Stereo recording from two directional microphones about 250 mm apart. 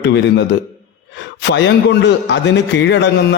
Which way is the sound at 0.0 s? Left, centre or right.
Left.